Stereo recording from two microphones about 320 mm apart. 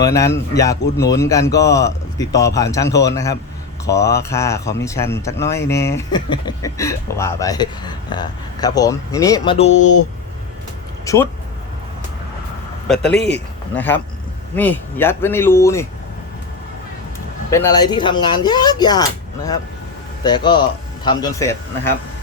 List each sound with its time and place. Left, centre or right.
0.1 s speech: centre
11.0 s speech: centre
13.0 s a man's voice: left
13.7 s speech: centre
17.5 s speech: centre
20.2 s speech: centre